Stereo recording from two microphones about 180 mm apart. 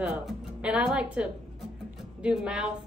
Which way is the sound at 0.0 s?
5° right (ahead or behind).